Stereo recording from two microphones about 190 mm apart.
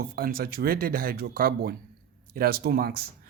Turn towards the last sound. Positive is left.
turn(degrees=-55)  # may be behind; listen again after turning